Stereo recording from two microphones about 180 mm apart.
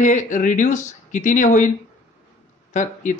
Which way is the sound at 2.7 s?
45° left (ahead or behind).